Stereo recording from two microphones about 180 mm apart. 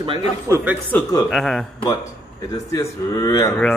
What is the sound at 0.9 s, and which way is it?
Speech, 20° left (ahead or behind).